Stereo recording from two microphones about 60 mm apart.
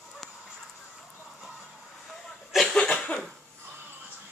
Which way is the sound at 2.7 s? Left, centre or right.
Centre.